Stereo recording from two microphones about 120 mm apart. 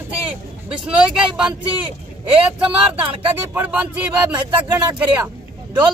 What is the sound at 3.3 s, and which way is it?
Speech, 15° right (ahead or behind).